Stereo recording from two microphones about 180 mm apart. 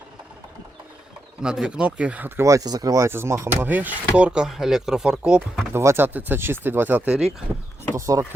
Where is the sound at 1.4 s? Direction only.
5° right (ahead or behind).